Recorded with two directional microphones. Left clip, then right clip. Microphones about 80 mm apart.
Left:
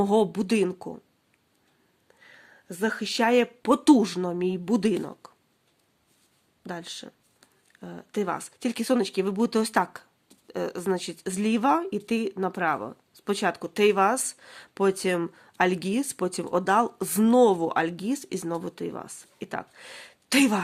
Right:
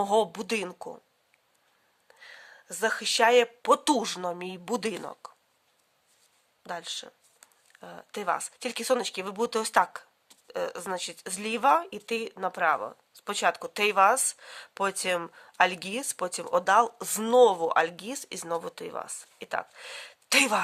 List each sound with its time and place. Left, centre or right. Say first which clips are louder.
0.0 s speech: left 2 dB; centre
2.0 s speech: right 3 dB; right
6.6 s speech: right 1 dB; right